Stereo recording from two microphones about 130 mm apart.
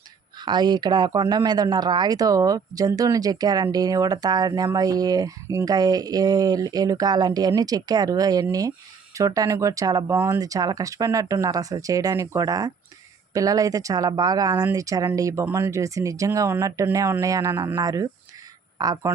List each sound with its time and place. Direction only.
0.3 s speech: 35° right (ahead or behind)